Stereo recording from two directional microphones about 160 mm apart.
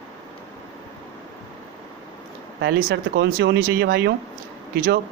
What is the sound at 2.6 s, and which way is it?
Speech, 75° right (ahead or behind).